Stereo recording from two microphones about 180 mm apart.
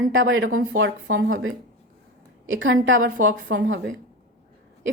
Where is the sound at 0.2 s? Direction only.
90° right.